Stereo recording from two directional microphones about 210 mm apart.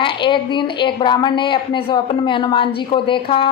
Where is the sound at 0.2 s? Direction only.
25° left (ahead or behind).